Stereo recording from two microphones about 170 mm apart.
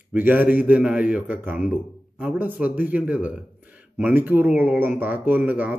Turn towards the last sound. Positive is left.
turn(degrees=-10)  # may be behind; listen again after turning